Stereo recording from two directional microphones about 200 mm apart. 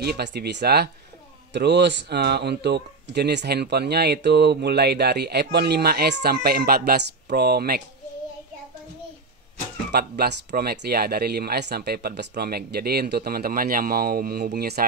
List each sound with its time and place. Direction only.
0.0 s speech: 55° right (ahead or behind)
9.8 s speech: 55° right (ahead or behind)